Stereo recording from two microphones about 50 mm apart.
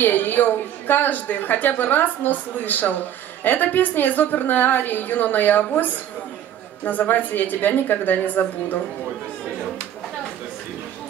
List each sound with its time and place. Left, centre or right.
0.0 s a woman's voice: left